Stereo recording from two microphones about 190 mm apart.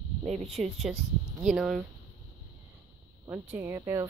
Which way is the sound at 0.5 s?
Centre (ahead or behind).